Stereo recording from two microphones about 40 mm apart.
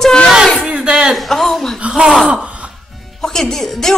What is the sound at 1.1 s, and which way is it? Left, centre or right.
Speech, centre.